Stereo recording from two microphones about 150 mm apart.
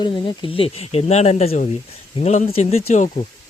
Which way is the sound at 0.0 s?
35° left (ahead or behind).